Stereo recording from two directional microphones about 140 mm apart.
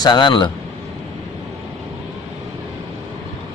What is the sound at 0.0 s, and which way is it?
Speech, 30° left (ahead or behind).